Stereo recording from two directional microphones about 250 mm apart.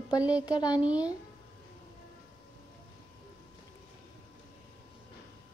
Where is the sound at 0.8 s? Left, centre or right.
Centre.